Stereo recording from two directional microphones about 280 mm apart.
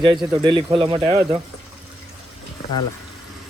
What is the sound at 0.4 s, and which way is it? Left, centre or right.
Speech, centre.